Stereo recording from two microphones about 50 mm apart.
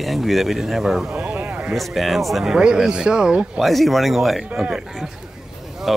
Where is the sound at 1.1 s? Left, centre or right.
Right.